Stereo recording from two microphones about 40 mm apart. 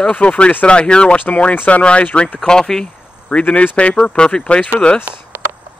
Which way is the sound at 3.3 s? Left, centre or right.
Left.